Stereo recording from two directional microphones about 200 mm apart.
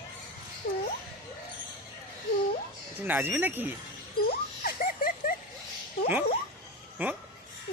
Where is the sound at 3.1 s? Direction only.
10° right (ahead or behind).